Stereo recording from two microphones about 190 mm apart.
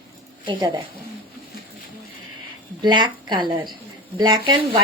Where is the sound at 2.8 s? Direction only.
25° right (ahead or behind).